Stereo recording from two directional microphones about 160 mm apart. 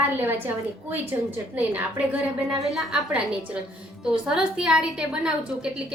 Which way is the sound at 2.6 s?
Centre (ahead or behind).